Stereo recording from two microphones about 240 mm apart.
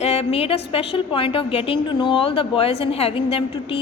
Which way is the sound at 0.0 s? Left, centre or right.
Left.